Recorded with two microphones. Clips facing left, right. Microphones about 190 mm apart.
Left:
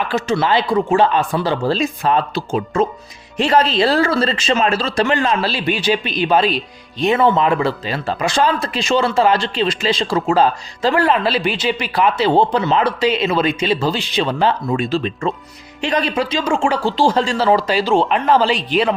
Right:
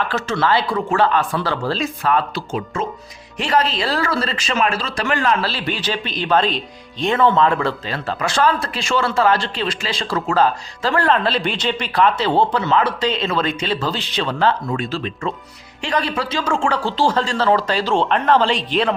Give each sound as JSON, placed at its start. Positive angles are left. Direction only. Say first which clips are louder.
{"t": 0.1, "sound": "a man's voice", "louder": "left 4 dB", "side_deg": 15}